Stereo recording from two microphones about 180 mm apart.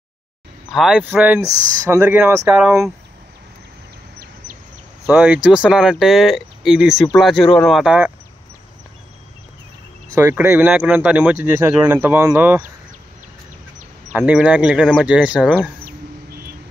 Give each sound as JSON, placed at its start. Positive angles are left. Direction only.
{"t": 0.7, "sound": "speech", "side_deg": 0}
{"t": 5.0, "sound": "speech", "side_deg": -10}
{"t": 10.1, "sound": "speech", "side_deg": -15}
{"t": 14.1, "sound": "speech", "side_deg": -5}